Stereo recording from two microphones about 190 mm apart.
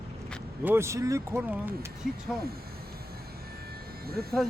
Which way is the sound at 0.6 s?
10° right (ahead or behind).